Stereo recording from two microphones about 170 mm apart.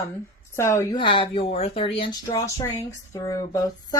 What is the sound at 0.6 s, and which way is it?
Speech, 15° left (ahead or behind).